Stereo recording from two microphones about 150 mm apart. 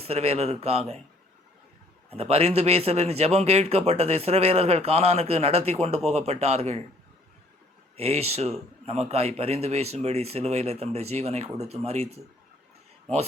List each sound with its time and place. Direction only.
0.0 s a man's voice: 40° right (ahead or behind)
2.0 s a man's voice: 40° right (ahead or behind)
7.9 s a man's voice: 45° right (ahead or behind)